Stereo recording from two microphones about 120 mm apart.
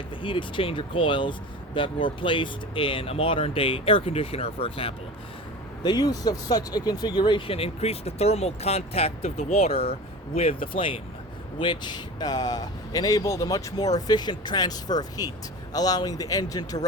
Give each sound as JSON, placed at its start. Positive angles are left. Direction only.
{"t": 0.2, "sound": "speech", "side_deg": 45}
{"t": 5.8, "sound": "speech", "side_deg": 35}